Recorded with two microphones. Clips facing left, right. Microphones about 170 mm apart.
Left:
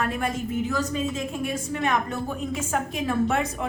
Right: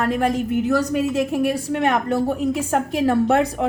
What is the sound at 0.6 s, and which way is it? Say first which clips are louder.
A woman's voice: right 7 dB; 70° right (ahead or behind).